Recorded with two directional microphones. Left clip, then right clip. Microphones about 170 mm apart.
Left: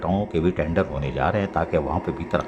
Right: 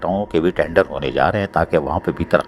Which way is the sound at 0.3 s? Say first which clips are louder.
Right 9 dB; 35° right (ahead or behind).